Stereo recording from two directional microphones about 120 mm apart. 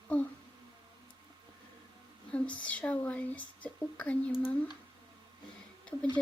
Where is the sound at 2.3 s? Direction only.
10° left (ahead or behind).